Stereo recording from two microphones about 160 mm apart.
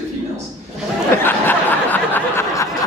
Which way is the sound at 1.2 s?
10° left (ahead or behind).